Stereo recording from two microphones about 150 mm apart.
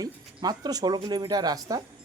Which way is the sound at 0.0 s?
25° right (ahead or behind).